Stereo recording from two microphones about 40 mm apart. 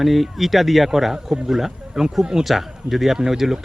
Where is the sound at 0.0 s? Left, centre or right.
Centre.